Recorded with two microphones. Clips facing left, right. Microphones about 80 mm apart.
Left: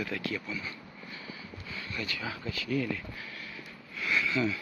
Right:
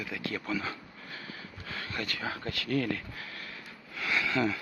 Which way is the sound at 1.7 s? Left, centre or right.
Right.